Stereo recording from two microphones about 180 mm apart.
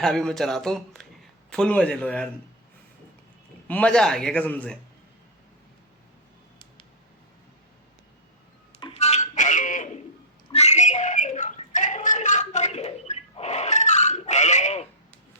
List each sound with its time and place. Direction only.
0.0 s speech: centre (ahead or behind)
3.7 s a man's voice: 5° left (ahead or behind)
8.8 s a sound: 35° left (ahead or behind)